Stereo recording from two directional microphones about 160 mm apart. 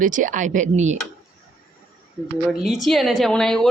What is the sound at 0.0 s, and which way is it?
Speech, 55° right (ahead or behind).